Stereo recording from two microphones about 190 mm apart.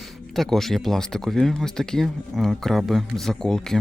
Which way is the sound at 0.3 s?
Centre (ahead or behind).